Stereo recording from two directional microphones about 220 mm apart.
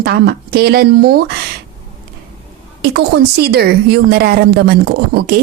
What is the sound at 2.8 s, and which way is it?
A woman's voice, 45° right (ahead or behind).